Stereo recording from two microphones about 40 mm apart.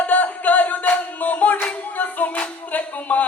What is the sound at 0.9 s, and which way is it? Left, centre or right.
Music, left.